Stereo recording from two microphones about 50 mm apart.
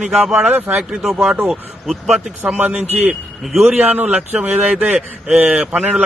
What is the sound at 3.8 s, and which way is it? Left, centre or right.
Speech, right.